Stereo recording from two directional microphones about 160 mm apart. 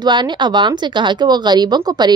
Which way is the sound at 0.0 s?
30° right (ahead or behind).